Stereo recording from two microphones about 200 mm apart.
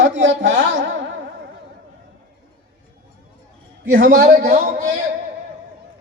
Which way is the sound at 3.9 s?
40° right (ahead or behind).